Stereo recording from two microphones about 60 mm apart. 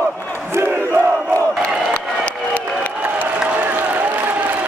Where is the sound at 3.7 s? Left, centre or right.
Right.